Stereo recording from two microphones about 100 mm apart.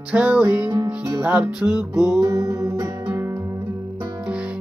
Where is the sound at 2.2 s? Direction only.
30° right (ahead or behind).